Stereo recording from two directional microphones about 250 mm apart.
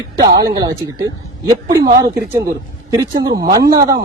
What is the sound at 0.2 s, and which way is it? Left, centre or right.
A woman's voice, centre.